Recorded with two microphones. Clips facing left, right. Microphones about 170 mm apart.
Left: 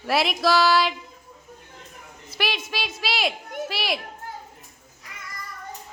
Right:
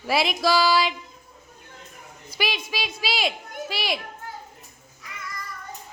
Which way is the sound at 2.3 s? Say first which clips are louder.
Even; centre (ahead or behind).